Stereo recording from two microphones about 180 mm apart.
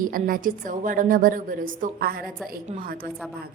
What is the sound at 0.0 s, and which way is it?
A woman's voice, 50° right (ahead or behind).